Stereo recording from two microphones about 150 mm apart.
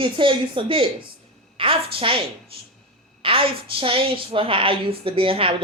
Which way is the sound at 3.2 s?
35° right (ahead or behind).